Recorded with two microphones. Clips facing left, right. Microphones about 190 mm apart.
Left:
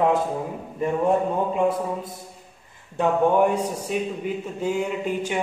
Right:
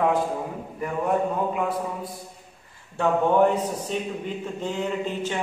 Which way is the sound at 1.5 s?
25° left (ahead or behind).